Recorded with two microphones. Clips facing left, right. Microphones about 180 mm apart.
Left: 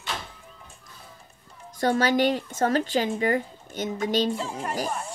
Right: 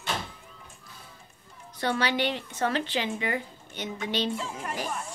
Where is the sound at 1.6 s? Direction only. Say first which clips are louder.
Left 5 dB; 45° left (ahead or behind).